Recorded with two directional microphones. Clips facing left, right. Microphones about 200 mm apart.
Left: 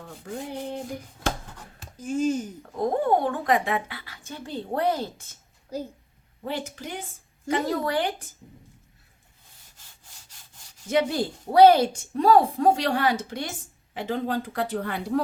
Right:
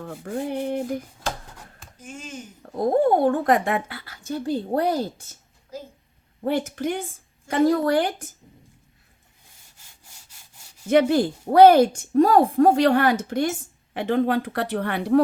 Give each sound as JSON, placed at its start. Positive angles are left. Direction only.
{"t": 0.0, "sound": "speech", "side_deg": -50}
{"t": 2.0, "sound": "speech", "side_deg": 40}
{"t": 2.7, "sound": "speech", "side_deg": -40}
{"t": 6.4, "sound": "speech", "side_deg": -50}
{"t": 7.5, "sound": "a woman's voice", "side_deg": -45}
{"t": 10.8, "sound": "a woman's voice", "side_deg": -60}
{"t": 13.9, "sound": "speech", "side_deg": -60}